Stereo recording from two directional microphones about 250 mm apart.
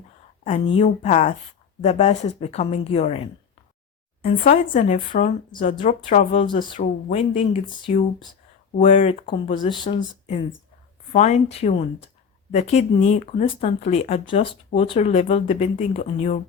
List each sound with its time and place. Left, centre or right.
0.4 s speech: left
6.7 s speech: left